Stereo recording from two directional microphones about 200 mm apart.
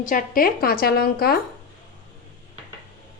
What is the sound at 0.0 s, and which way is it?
A woman's voice, 45° left (ahead or behind).